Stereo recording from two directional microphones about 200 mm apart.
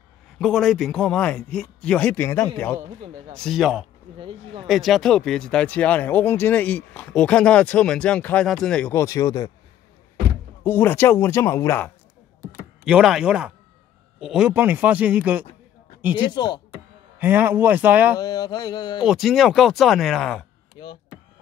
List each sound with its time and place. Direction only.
0.4 s speech: centre (ahead or behind)
4.2 s speech: 25° right (ahead or behind)
4.6 s speech: centre (ahead or behind); by 9.5 s 20° left (ahead or behind)
10.6 s speech: 10° left (ahead or behind)
12.8 s speech: 5° right (ahead or behind)
16.2 s mantra: 20° left (ahead or behind)
17.2 s speech: 10° right (ahead or behind)
18.2 s mantra: 20° left (ahead or behind)
19.0 s speech: centre (ahead or behind)
20.8 s mantra: 20° left (ahead or behind)